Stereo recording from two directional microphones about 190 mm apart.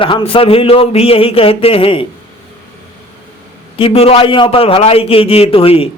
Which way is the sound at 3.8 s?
30° left (ahead or behind).